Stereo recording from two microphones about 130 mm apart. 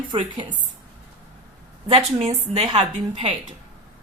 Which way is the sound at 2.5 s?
35° right (ahead or behind).